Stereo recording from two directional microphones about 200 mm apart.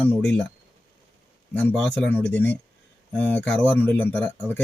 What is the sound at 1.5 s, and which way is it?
Speech, 5° left (ahead or behind).